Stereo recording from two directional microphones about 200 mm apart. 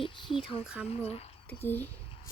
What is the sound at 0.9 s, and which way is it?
Speech, 30° left (ahead or behind).